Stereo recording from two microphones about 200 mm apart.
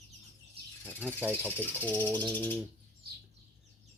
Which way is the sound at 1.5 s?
10° left (ahead or behind).